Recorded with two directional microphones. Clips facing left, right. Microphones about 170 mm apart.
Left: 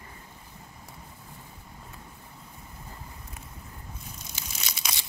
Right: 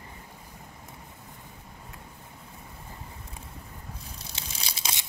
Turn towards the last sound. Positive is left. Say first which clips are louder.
# right 1 dB
turn(degrees=-30)  # may be behind; listen again after turning